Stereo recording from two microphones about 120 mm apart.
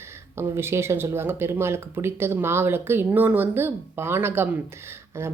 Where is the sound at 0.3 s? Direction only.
20° right (ahead or behind).